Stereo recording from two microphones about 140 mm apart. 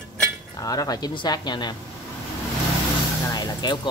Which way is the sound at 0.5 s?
25° left (ahead or behind).